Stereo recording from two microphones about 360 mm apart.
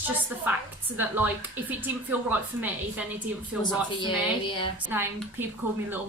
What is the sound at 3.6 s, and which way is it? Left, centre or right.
Speech, centre.